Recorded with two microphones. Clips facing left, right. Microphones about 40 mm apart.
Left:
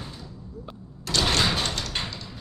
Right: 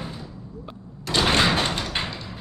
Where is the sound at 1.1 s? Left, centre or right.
Right.